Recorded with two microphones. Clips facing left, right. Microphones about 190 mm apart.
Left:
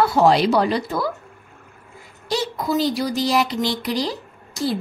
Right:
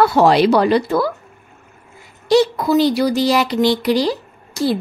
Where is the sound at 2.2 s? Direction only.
70° right (ahead or behind).